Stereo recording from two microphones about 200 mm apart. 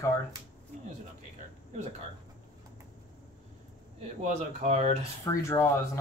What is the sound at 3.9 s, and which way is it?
Speech, 35° right (ahead or behind).